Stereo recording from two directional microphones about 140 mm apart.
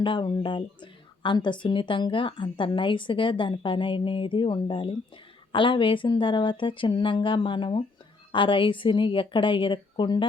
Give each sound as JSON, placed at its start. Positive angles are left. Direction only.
{"t": 0.0, "sound": "speech", "side_deg": 35}